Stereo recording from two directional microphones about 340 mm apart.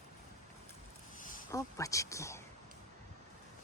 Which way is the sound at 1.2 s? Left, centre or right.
Left.